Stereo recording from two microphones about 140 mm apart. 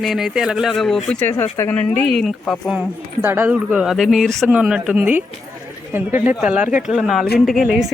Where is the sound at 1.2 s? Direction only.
15° left (ahead or behind).